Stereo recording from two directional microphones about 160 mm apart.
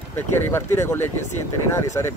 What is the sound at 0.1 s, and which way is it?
Speech, 15° left (ahead or behind).